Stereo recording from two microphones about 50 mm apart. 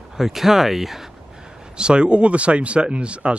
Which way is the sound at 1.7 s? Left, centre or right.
Centre.